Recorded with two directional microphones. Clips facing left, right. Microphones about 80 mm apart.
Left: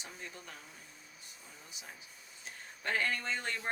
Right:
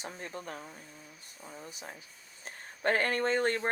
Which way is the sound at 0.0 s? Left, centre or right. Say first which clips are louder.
Right 7 dB; right.